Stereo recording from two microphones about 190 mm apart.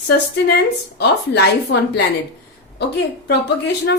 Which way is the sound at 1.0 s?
60° left (ahead or behind).